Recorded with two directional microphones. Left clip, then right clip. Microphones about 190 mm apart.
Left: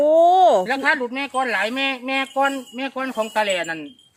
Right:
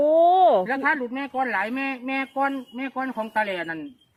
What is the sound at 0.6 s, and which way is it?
Speech, 85° left.